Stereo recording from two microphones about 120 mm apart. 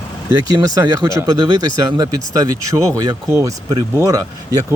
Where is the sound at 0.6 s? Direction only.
25° right (ahead or behind).